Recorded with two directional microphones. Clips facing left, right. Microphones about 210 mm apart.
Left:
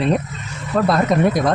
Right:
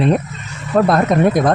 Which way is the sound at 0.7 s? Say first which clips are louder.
Right 4 dB; 45° right (ahead or behind).